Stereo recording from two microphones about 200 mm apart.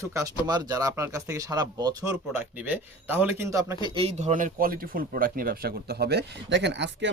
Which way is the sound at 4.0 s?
35° right (ahead or behind).